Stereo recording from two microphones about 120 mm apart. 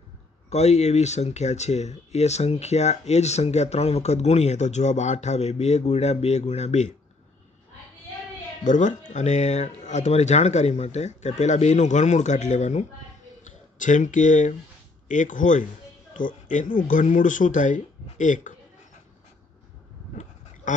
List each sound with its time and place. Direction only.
0.5 s speech: 70° left (ahead or behind)
8.6 s speech: 90° left
9.1 s speech: 75° left (ahead or behind)
13.4 s a sound: 90° left
15.1 s speech: 90° left
20.7 s duck: 90° left